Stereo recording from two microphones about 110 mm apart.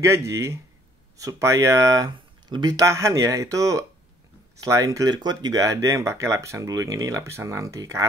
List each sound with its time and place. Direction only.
0.0 s speech: 25° right (ahead or behind)
2.1 s speech: 40° right (ahead or behind)